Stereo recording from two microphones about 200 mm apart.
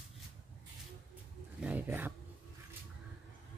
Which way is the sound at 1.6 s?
5° right (ahead or behind).